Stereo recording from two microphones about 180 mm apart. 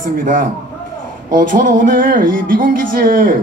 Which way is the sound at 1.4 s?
50° right (ahead or behind).